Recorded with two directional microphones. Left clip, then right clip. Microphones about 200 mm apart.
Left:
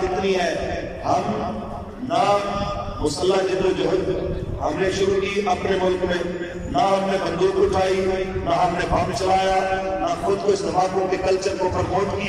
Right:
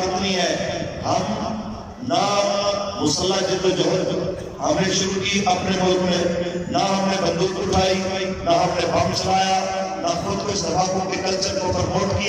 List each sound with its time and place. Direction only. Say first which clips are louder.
6.8 s a man's voice: left 2 dB; 20° right (ahead or behind)